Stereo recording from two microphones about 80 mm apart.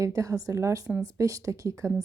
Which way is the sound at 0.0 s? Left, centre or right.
Right.